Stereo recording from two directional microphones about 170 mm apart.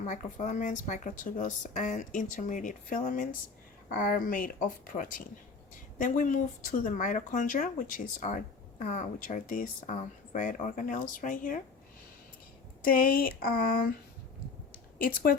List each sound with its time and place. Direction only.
0.0 s speech: 45° left (ahead or behind)
12.8 s speech: 60° left (ahead or behind)
14.9 s speech: 55° left (ahead or behind)